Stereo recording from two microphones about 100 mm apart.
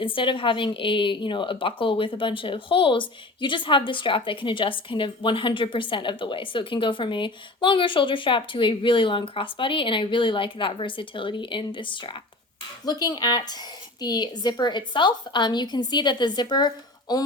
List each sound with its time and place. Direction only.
0.0 s a woman's voice: 60° left (ahead or behind)
12.8 s a woman's voice: 40° left (ahead or behind)